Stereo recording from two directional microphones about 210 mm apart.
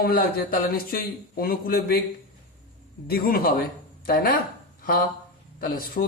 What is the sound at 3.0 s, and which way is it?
Speech, 45° left (ahead or behind).